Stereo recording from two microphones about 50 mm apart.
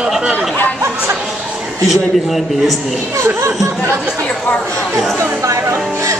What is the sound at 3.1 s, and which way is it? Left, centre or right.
Speech, right.